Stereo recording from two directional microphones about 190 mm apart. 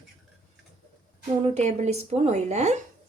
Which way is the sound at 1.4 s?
35° right (ahead or behind).